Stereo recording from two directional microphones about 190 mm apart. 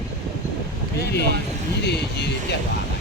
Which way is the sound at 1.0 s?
60° left (ahead or behind).